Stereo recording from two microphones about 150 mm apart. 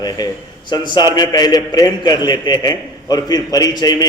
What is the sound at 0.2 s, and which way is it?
A man's voice, 25° left (ahead or behind).